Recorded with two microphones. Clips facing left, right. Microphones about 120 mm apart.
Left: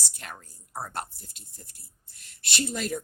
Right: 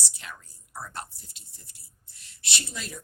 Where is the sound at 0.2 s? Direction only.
45° left (ahead or behind).